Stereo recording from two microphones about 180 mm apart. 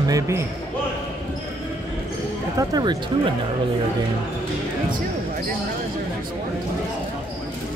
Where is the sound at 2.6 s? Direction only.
20° right (ahead or behind).